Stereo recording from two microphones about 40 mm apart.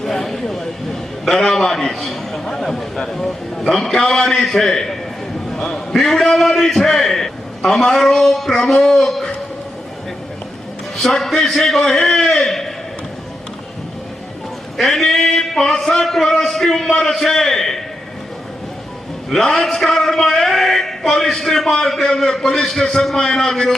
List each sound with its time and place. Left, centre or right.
0.0 s a sound: centre
1.2 s a man's voice: centre
10.9 s a man's voice: centre
14.8 s a man's voice: centre
19.3 s a man's voice: centre
20.4 s a sound: centre
21.3 s a man's voice: centre